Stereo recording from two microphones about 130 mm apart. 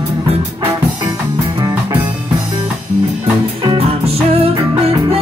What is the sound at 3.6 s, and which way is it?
Music, 50° right (ahead or behind).